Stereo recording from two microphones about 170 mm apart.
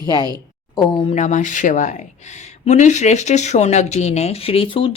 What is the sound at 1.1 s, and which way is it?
Speech, 45° left (ahead or behind).